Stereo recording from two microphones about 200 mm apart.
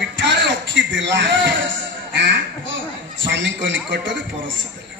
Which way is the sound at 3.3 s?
65° right (ahead or behind).